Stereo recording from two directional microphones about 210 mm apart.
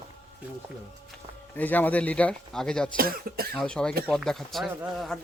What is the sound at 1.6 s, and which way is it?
Speech, 10° left (ahead or behind).